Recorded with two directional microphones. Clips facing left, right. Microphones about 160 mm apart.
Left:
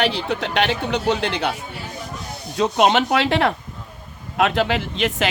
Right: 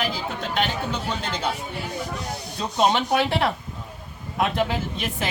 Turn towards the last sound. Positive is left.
turn(degrees=90)